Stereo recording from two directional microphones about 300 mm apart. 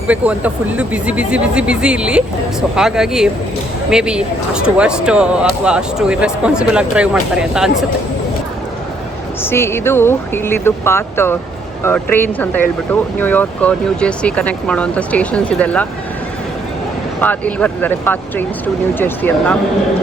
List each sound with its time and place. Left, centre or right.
0.1 s speech: centre
9.4 s speech: centre
17.2 s speech: centre